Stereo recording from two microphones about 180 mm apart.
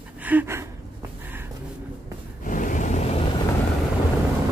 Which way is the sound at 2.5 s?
45° left (ahead or behind).